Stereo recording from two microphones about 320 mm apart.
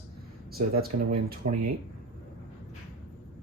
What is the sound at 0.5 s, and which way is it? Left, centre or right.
Speech, right.